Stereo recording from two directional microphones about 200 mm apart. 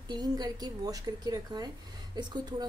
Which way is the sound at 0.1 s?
20° right (ahead or behind).